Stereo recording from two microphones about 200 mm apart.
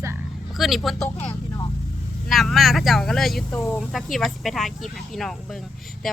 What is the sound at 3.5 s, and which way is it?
Speech, 10° left (ahead or behind).